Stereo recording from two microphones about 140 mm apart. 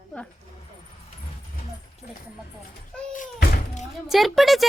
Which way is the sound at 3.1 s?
65° left (ahead or behind).